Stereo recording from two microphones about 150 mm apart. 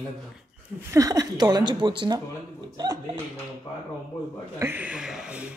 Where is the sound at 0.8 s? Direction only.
20° right (ahead or behind).